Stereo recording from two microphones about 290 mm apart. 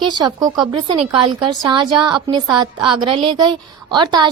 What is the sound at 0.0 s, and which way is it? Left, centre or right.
A woman's voice, centre.